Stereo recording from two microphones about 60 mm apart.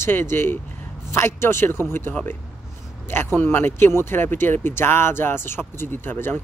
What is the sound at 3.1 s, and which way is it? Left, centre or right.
Speech, left.